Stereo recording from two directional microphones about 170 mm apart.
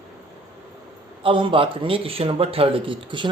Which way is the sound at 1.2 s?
30° right (ahead or behind).